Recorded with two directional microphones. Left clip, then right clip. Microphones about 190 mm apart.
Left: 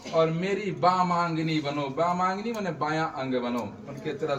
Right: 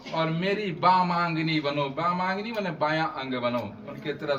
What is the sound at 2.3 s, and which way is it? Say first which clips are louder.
A man's voice: right 1 dB; 20° left (ahead or behind).